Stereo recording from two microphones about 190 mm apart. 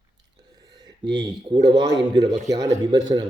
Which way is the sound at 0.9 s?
25° right (ahead or behind).